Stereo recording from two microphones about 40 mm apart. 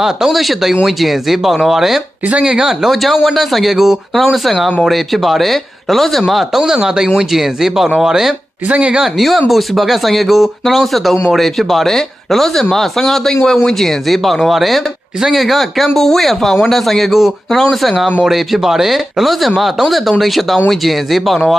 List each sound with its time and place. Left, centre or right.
0.0 s speech: centre
2.8 s speech: centre
6.2 s speech: centre
8.7 s speech: right
9.1 s speech: centre